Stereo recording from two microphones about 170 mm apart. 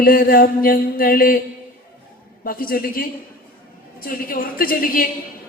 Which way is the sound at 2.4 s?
60° left (ahead or behind).